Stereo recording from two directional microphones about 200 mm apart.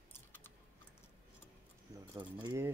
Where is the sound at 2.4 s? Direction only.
15° right (ahead or behind).